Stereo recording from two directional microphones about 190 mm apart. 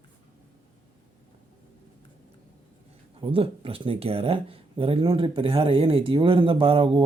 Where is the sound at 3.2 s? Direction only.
30° right (ahead or behind).